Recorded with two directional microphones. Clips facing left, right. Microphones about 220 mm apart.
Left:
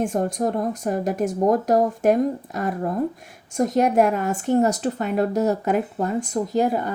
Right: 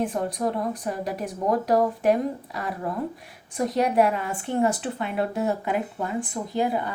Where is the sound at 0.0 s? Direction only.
45° left (ahead or behind).